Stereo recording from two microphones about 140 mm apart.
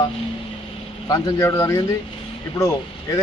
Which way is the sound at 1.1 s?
20° left (ahead or behind).